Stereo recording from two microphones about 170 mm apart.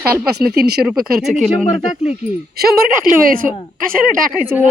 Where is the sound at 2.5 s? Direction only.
60° right (ahead or behind).